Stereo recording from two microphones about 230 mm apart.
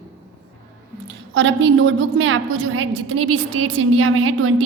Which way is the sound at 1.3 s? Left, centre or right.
Right.